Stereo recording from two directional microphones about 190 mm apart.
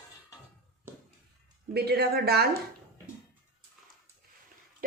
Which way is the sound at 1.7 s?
55° right (ahead or behind).